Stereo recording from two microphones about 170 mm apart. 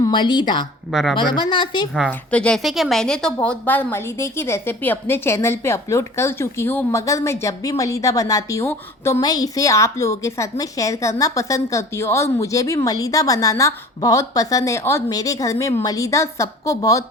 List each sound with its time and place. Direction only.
0.0 s speech: 30° left (ahead or behind)
0.9 s speech: centre (ahead or behind)
1.1 s a woman's voice: 30° left (ahead or behind)
2.0 s a woman's voice: 5° left (ahead or behind)